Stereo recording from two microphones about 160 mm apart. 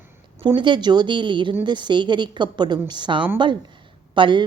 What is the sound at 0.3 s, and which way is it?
A woman's voice, 30° right (ahead or behind).